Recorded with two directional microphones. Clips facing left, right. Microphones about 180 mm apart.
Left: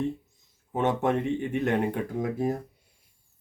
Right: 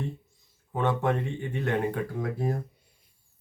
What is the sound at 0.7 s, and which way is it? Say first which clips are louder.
Speech: left 2 dB; 20° left (ahead or behind).